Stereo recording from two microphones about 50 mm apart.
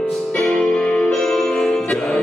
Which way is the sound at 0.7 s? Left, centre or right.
Left.